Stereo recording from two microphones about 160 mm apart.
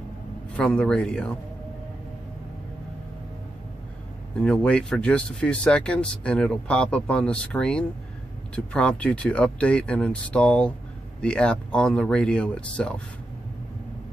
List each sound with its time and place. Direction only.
0.6 s speech: 5° left (ahead or behind)
4.4 s speech: 5° left (ahead or behind)